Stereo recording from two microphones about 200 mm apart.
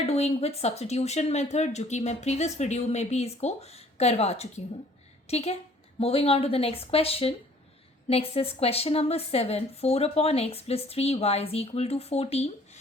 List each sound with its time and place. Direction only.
0.0 s a woman's voice: 30° left (ahead or behind)